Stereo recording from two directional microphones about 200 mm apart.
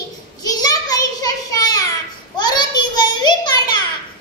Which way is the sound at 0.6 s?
20° left (ahead or behind).